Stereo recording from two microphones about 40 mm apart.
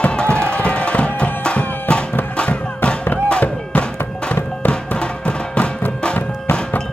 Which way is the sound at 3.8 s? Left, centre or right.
Left.